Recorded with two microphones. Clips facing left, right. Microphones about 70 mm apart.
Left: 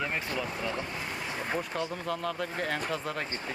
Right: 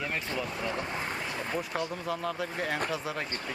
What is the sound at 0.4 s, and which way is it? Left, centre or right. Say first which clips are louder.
Speech: even; centre.